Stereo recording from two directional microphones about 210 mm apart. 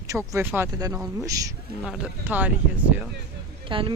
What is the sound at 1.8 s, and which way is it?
Speech, 5° right (ahead or behind).